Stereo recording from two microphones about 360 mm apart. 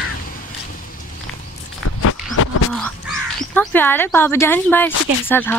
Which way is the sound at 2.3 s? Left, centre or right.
Left.